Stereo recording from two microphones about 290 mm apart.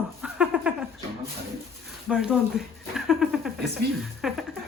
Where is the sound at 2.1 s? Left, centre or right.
Centre.